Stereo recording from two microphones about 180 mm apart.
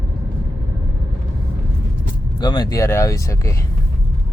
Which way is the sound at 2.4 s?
25° left (ahead or behind).